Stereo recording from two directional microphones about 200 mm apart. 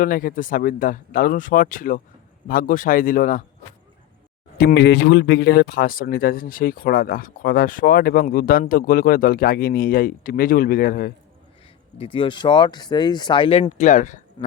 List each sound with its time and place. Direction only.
0.0 s speech: 45° left (ahead or behind)
4.5 s speech: 55° left (ahead or behind)
11.9 s speech: 25° left (ahead or behind)
14.4 s speech: 20° left (ahead or behind)